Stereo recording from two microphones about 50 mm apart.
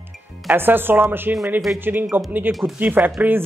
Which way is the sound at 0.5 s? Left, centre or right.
Right.